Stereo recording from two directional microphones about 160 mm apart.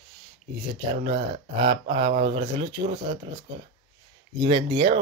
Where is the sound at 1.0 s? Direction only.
35° right (ahead or behind).